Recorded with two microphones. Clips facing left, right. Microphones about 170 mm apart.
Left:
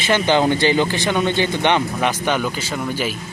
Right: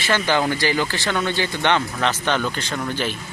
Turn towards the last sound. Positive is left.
turn(degrees=10)  # may be behind; listen again after turning